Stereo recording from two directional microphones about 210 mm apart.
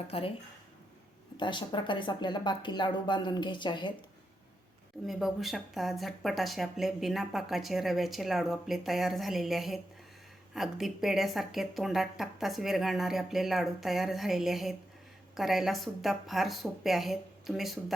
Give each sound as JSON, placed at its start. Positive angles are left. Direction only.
{"t": 0.1, "sound": "speech", "side_deg": 25}
{"t": 1.4, "sound": "speech", "side_deg": 20}
{"t": 5.0, "sound": "speech", "side_deg": 0}